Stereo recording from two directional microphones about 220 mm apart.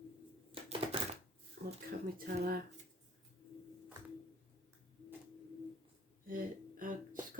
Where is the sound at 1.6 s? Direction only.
40° right (ahead or behind).